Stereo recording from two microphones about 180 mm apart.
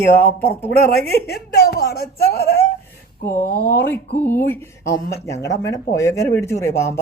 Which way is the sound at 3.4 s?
60° left (ahead or behind).